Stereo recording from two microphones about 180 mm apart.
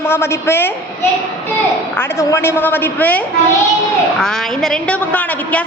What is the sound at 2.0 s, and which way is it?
A woman's voice, 15° left (ahead or behind).